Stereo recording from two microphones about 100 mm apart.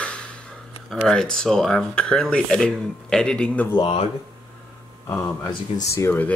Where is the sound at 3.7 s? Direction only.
60° left (ahead or behind).